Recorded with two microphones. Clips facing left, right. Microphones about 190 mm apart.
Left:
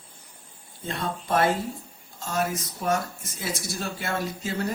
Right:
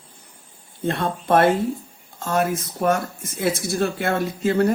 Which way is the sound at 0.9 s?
60° right (ahead or behind).